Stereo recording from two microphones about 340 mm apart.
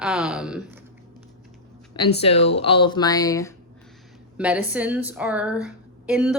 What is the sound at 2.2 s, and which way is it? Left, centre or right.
Speech, centre.